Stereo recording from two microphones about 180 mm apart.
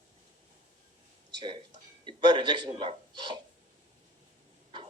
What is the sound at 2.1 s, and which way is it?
A man's voice, 25° right (ahead or behind).